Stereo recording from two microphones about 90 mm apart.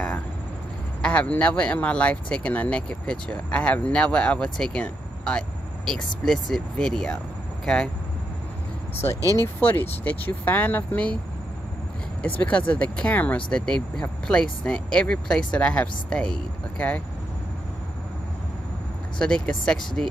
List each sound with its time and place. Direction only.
1.0 s speech: 15° left (ahead or behind)
9.3 s speech: 25° left (ahead or behind)
12.2 s speech: 15° left (ahead or behind)
19.1 s speech: 10° left (ahead or behind)